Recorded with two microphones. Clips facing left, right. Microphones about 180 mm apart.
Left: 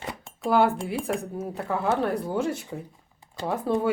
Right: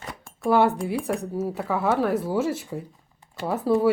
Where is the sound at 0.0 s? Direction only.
20° left (ahead or behind).